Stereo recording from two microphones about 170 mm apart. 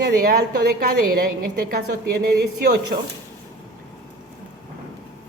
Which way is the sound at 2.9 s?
60° right (ahead or behind).